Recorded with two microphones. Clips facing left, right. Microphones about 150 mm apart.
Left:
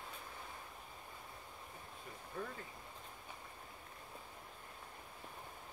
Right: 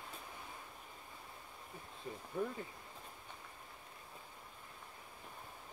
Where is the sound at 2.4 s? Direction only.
15° right (ahead or behind).